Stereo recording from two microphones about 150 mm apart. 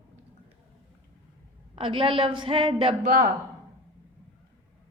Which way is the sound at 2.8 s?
45° right (ahead or behind).